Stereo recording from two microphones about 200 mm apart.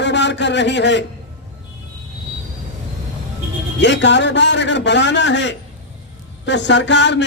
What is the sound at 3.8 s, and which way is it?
A man's voice, 60° left (ahead or behind).